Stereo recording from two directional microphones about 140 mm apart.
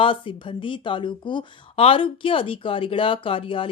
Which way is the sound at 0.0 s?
40° left (ahead or behind).